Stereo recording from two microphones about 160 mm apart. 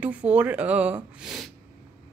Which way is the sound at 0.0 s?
10° right (ahead or behind).